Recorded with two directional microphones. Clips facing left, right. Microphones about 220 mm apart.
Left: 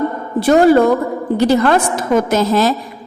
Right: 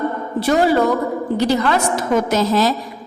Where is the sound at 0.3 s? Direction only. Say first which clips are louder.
Left 6 dB; 50° left (ahead or behind).